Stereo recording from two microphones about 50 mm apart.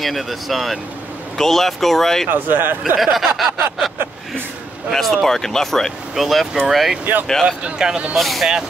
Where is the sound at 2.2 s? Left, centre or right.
Right.